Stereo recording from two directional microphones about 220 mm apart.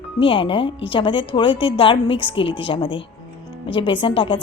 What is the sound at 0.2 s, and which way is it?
A woman's voice, 25° left (ahead or behind).